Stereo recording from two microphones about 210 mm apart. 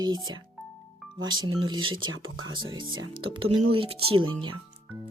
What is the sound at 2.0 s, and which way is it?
Speech, 70° right (ahead or behind).